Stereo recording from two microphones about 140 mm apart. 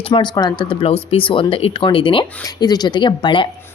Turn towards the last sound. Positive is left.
turn(degrees=35)  # may be behind; listen again after turning